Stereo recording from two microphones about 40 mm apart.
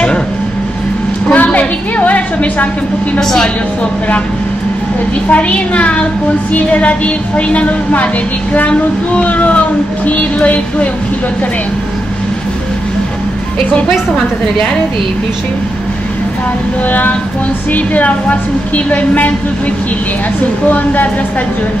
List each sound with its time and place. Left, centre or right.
1.3 s a sound: left
3.2 s a woman's voice: centre
5.3 s a woman's voice: left
13.8 s a woman's voice: centre
17.7 s a woman's voice: left
20.6 s a woman's voice: left